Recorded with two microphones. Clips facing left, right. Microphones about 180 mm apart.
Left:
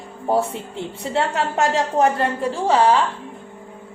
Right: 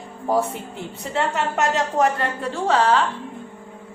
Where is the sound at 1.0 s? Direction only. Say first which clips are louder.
Left 1 dB; 30° left (ahead or behind).